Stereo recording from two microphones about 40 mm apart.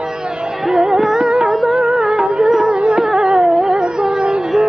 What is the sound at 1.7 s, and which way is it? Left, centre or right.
Music, right.